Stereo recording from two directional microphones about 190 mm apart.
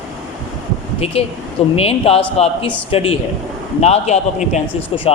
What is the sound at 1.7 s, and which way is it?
A man's voice, 30° left (ahead or behind).